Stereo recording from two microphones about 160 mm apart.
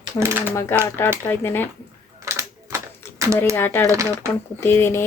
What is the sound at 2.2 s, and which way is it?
Typewriter, 20° right (ahead or behind).